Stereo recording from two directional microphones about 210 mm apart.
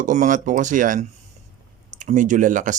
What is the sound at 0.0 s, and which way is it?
Speech, 35° right (ahead or behind).